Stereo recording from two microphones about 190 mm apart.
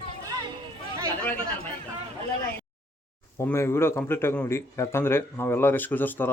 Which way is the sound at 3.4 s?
15° left (ahead or behind).